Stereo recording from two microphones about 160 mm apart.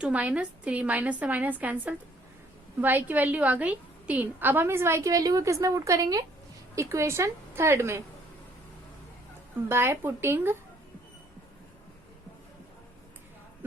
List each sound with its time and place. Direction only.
0.0 s a woman's voice: 10° right (ahead or behind)
9.6 s a woman's voice: 15° right (ahead or behind)